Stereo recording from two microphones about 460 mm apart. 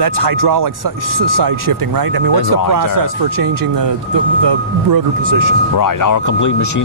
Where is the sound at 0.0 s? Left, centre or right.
Right.